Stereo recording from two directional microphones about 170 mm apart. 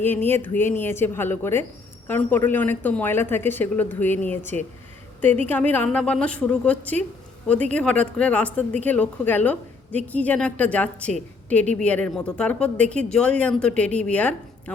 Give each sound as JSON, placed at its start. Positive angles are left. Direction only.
{"t": 0.0, "sound": "a woman's voice", "side_deg": 10}